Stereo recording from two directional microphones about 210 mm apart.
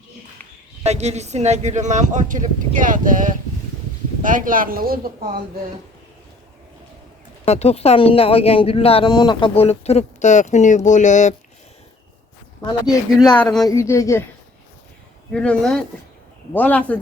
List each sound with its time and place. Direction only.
0.9 s speech: 30° right (ahead or behind)
7.4 s speech: 30° left (ahead or behind)
12.8 s speech: 20° left (ahead or behind)
13.3 s speech: 5° left (ahead or behind)
13.7 s a woman's voice: 15° left (ahead or behind)
15.3 s a woman's voice: 5° left (ahead or behind)